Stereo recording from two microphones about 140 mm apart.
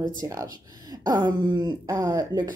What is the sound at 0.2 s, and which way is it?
Speech, 25° right (ahead or behind).